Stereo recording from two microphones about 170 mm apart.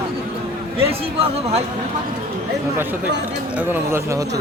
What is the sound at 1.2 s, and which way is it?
Speech, 35° right (ahead or behind).